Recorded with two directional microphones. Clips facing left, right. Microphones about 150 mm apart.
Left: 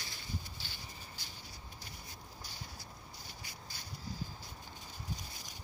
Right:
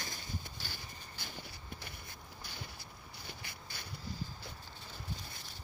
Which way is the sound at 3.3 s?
60° right (ahead or behind).